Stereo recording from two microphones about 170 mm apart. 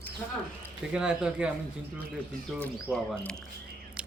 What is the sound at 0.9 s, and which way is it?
Speech, 5° right (ahead or behind).